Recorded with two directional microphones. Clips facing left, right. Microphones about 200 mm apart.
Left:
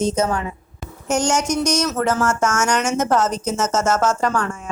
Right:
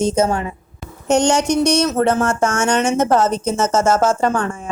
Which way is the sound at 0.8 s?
Centre (ahead or behind).